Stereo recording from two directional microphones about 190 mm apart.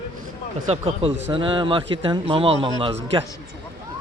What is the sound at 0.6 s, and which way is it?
A man's voice, 30° right (ahead or behind).